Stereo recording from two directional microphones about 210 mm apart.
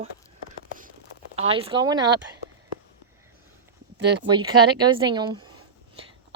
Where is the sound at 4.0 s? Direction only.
55° right (ahead or behind).